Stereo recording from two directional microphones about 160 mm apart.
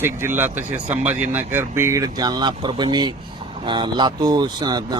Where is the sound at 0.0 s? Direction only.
15° right (ahead or behind).